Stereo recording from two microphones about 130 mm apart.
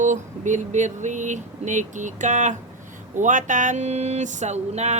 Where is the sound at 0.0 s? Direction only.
70° right (ahead or behind).